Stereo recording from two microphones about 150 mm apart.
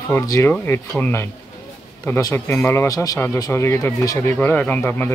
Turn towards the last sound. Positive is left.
turn(degrees=10)  # may be behind; listen again after turning